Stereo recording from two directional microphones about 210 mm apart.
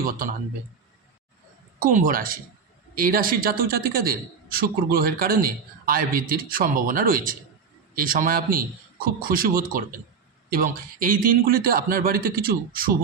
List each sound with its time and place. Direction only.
1.8 s a man's voice: 40° right (ahead or behind)